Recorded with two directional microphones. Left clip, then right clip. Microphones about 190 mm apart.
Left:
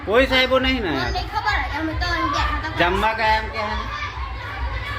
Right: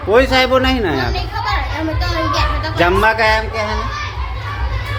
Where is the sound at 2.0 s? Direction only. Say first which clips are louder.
Right 3 dB; 35° right (ahead or behind).